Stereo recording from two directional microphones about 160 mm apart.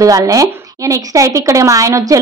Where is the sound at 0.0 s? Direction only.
20° right (ahead or behind).